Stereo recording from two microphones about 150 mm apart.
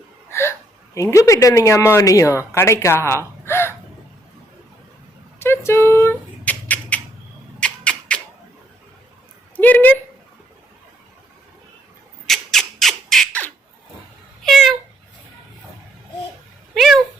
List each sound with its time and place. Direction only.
0.3 s hiccup: 15° left (ahead or behind)
0.9 s a woman's voice: 20° left (ahead or behind)
5.4 s rodents: 15° left (ahead or behind)
7.6 s a sound: 5° left (ahead or behind)
9.6 s a woman's voice: 10° left (ahead or behind)
12.2 s squawk: 5° left (ahead or behind)
14.4 s a sound: centre (ahead or behind)
16.7 s cat: centre (ahead or behind)